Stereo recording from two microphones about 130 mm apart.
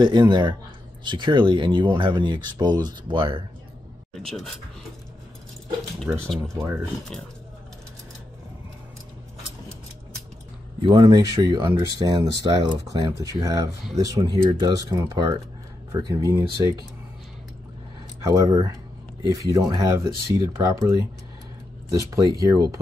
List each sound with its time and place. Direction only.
0.0 s speech: 35° right (ahead or behind)
4.3 s speech: centre (ahead or behind)
6.2 s speech: 5° left (ahead or behind)
6.6 s speech: 10° right (ahead or behind)
10.8 s speech: 35° right (ahead or behind)
18.2 s speech: 30° right (ahead or behind)
21.9 s speech: 25° right (ahead or behind)